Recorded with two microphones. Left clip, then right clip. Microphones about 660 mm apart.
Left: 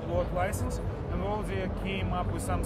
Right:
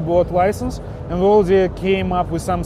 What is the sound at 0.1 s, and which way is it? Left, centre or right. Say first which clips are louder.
Speech: right 15 dB; right.